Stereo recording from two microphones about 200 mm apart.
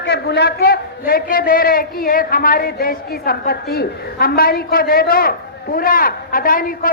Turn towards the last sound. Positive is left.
turn(degrees=45)  # may be behind; listen again after turning